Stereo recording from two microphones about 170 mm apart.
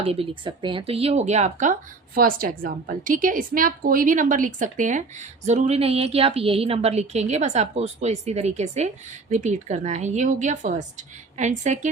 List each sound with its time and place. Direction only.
0.0 s a woman's voice: 35° right (ahead or behind)